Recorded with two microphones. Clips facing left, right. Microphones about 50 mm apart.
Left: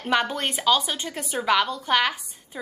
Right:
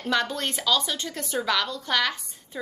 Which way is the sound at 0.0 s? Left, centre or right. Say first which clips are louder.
Left 2 dB; left.